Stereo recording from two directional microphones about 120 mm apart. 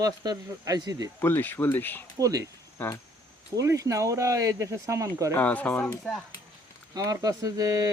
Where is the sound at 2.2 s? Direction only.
30° right (ahead or behind).